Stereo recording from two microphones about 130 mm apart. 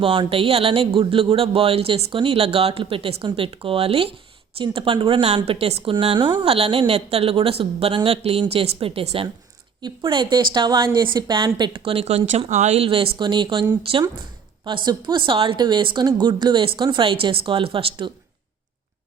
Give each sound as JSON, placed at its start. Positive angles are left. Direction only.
{"t": 0.0, "sound": "speech", "side_deg": -40}